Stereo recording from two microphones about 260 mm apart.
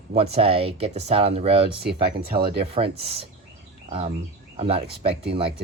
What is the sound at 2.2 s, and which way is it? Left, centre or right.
Speech, right.